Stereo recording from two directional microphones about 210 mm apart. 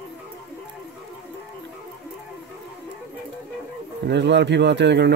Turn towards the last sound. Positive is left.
turn(degrees=-55)  # may be behind; listen again after turning